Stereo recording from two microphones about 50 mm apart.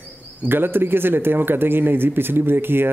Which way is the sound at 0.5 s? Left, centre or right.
Right.